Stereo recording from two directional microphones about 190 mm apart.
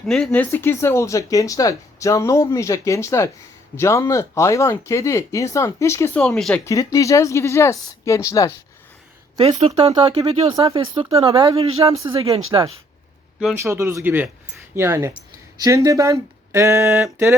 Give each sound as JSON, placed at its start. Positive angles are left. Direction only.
{"t": 0.1, "sound": "speech", "side_deg": 5}
{"t": 6.7, "sound": "speech", "side_deg": 15}
{"t": 9.4, "sound": "speech", "side_deg": -35}
{"t": 13.6, "sound": "a sound", "side_deg": -15}
{"t": 15.6, "sound": "speech", "side_deg": -20}
{"t": 16.5, "sound": "a sound", "side_deg": -15}